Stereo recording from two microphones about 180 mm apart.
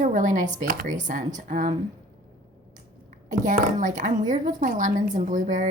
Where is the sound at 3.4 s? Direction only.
45° right (ahead or behind).